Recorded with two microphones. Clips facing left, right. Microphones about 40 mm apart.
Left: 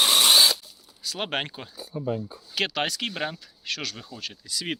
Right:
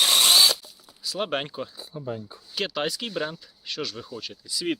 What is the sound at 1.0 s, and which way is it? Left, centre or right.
Speech, left.